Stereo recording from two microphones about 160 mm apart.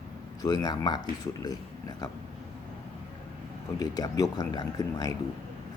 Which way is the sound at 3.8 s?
25° left (ahead or behind).